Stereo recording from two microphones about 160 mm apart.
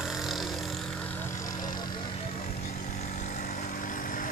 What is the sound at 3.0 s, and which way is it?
Vehicle, 50° left (ahead or behind).